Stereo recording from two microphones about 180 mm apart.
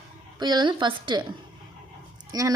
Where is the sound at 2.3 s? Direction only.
20° right (ahead or behind).